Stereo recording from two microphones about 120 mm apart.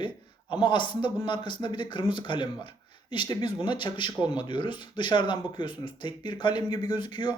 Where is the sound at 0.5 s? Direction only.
40° left (ahead or behind).